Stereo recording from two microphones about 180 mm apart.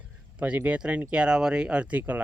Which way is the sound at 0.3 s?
5° right (ahead or behind).